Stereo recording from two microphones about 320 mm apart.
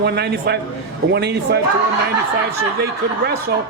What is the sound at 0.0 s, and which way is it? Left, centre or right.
A man's voice, right.